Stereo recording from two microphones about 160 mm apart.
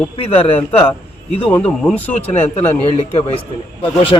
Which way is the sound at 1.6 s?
10° left (ahead or behind).